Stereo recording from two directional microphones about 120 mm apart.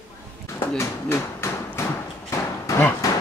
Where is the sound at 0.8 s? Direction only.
20° left (ahead or behind).